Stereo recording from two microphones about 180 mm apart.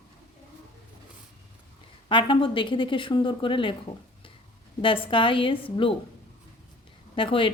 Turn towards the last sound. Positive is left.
turn(degrees=30)  # may be behind; listen again after turning